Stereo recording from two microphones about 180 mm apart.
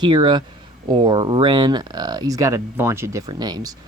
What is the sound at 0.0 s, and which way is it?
Speech, 25° right (ahead or behind).